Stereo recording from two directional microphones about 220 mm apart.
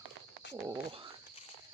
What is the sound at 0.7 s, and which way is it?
Speech, 25° right (ahead or behind).